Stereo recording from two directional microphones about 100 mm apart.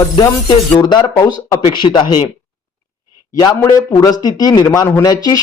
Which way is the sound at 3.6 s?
35° left (ahead or behind).